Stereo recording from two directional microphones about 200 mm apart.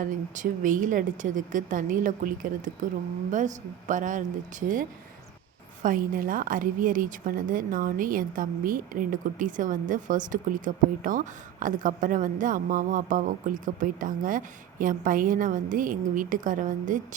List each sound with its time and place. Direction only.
0.0 s a woman's voice: 40° right (ahead or behind)
5.8 s a woman's voice: 45° right (ahead or behind)